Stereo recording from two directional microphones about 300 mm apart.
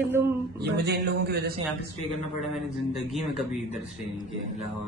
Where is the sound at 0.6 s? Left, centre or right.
Right.